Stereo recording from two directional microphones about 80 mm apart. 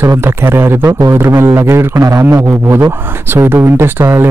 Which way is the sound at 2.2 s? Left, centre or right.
Right.